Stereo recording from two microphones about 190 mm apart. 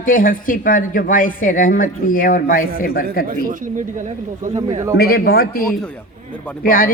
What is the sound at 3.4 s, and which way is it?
Speech, 45° right (ahead or behind).